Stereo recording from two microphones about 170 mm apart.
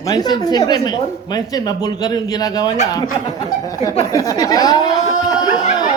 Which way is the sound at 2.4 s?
20° left (ahead or behind).